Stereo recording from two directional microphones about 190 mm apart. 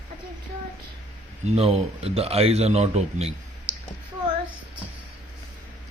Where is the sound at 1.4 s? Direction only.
35° right (ahead or behind).